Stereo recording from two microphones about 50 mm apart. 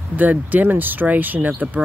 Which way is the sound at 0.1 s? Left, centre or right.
Right.